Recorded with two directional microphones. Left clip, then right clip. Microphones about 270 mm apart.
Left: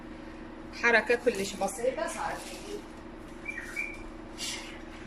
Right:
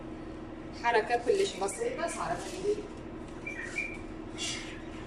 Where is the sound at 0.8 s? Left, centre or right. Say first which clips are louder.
Left 4 dB; left.